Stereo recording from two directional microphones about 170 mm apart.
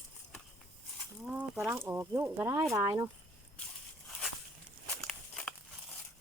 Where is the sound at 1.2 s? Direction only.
Centre (ahead or behind).